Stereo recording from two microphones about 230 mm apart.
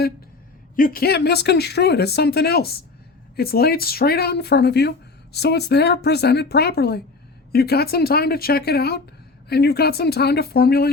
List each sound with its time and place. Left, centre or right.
0.8 s speech: left